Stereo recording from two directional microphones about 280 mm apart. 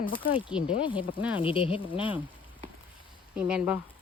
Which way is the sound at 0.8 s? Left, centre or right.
Centre.